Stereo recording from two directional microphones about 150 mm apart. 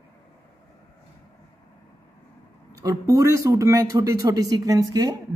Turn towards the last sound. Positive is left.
turn(degrees=-25)  # may be behind; listen again after turning